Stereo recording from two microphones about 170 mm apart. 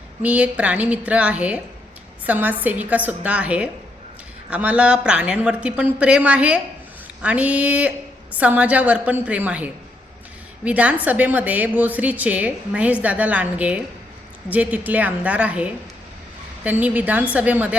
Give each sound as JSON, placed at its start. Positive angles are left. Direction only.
{"t": 0.2, "sound": "a woman's voice", "side_deg": -10}